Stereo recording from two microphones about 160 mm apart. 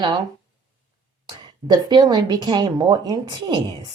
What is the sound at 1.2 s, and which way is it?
A woman's voice, 30° right (ahead or behind).